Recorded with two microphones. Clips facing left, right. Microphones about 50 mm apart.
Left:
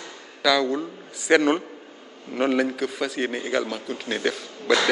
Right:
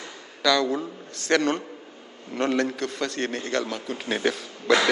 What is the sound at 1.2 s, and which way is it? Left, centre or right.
A man's voice, centre.